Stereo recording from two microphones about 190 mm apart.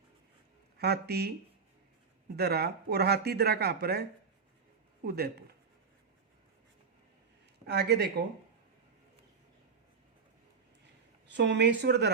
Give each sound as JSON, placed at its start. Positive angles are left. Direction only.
{"t": 0.8, "sound": "speech", "side_deg": -55}
{"t": 5.0, "sound": "speech", "side_deg": -55}
{"t": 7.7, "sound": "speech", "side_deg": -60}
{"t": 11.3, "sound": "speech", "side_deg": -65}